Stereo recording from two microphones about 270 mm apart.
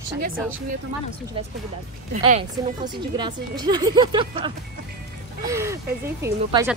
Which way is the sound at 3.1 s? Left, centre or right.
Centre.